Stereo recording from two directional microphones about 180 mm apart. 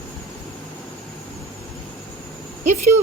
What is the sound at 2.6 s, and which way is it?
Speech, 40° right (ahead or behind).